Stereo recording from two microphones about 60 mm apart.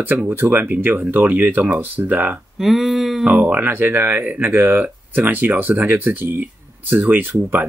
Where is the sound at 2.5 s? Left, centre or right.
Centre.